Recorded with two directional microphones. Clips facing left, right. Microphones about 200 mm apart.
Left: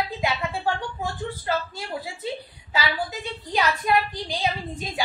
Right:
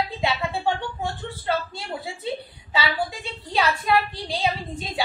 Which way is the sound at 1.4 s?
30° right (ahead or behind).